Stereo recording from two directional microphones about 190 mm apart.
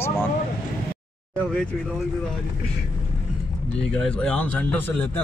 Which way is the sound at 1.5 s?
5° left (ahead or behind).